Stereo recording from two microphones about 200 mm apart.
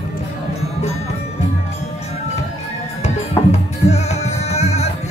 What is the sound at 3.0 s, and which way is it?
Music, 35° left (ahead or behind).